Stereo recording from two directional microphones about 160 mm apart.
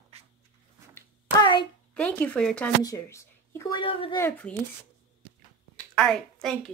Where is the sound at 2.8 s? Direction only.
20° left (ahead or behind).